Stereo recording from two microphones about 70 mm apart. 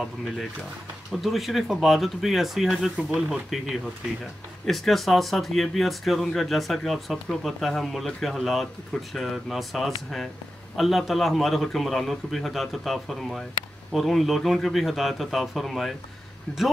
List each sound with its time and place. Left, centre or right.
1.2 s speech: centre
16.5 s speech: centre